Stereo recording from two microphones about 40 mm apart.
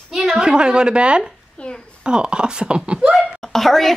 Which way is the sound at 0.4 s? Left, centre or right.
Right.